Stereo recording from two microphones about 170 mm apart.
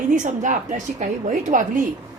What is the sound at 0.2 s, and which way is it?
A woman's voice, 50° right (ahead or behind).